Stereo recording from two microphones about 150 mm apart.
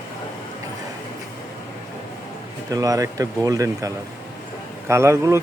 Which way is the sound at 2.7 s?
25° right (ahead or behind).